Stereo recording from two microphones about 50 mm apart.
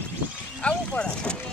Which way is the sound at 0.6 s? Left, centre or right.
Left.